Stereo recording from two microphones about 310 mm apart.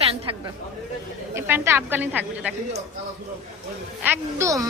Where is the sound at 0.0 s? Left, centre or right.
Centre.